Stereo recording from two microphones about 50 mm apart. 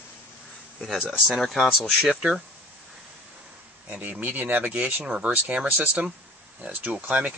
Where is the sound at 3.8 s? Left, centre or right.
Right.